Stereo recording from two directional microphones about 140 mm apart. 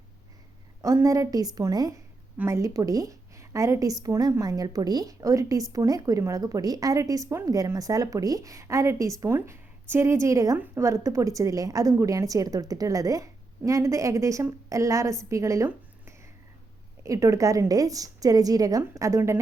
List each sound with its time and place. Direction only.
0.8 s a woman's voice: 25° right (ahead or behind)